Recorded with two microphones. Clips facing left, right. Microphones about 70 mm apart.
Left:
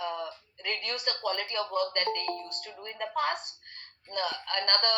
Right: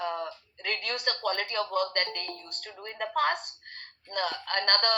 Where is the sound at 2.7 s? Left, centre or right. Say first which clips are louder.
Right 3 dB; right.